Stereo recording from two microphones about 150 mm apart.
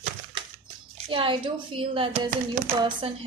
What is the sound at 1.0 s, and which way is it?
A woman's voice, 35° right (ahead or behind).